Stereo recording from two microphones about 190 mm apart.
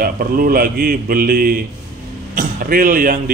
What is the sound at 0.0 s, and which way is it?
A man's voice, 50° right (ahead or behind).